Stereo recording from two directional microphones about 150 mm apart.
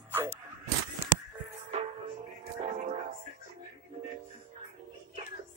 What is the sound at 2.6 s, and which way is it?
Music, 55° right (ahead or behind).